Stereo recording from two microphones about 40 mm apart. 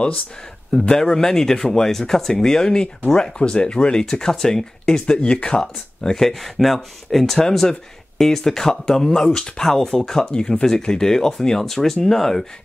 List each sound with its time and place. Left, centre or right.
0.8 s speech: centre
5.6 s speech: centre